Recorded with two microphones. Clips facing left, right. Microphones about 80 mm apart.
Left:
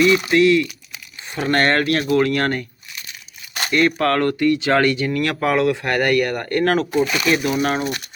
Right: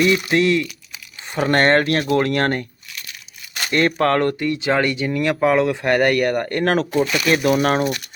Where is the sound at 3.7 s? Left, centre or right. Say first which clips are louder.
Even; right.